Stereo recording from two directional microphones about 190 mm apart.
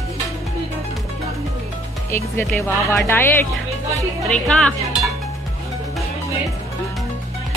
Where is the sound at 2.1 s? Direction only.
10° left (ahead or behind).